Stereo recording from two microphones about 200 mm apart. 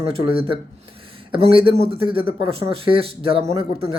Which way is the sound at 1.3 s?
25° right (ahead or behind).